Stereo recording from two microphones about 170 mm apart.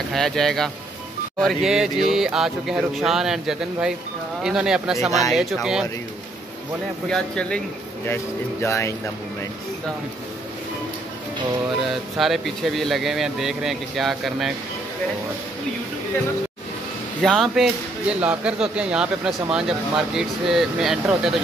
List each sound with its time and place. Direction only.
0.1 s speech: centre (ahead or behind)
7.1 s speech: 5° left (ahead or behind)
8.1 s speech: 15° left (ahead or behind)
11.8 s speech: centre (ahead or behind)
17.2 s speech: centre (ahead or behind)